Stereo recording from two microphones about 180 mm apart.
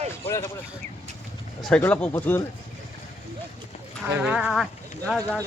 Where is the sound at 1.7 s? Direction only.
10° left (ahead or behind).